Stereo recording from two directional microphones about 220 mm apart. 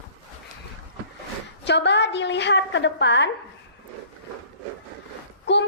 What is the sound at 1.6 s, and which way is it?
A woman's voice, 50° left (ahead or behind).